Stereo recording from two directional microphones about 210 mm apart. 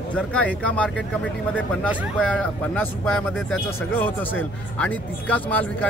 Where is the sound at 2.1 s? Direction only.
5° left (ahead or behind).